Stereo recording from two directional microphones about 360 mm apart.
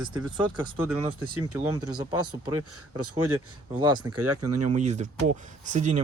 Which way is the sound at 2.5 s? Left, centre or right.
Right.